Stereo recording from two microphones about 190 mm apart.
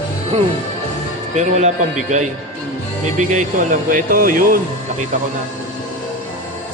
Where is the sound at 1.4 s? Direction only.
40° right (ahead or behind).